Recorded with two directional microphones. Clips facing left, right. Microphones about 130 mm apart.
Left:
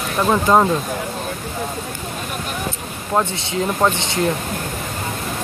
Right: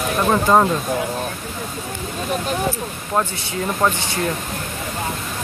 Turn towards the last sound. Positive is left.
turn(degrees=20)  # may be behind; listen again after turning